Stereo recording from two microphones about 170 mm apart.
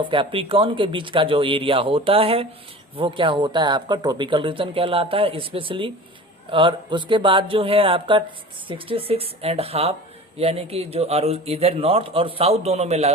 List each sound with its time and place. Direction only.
0.0 s a man's voice: 30° right (ahead or behind)